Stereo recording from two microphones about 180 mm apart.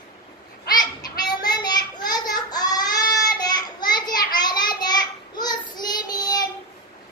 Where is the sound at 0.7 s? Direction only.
20° left (ahead or behind).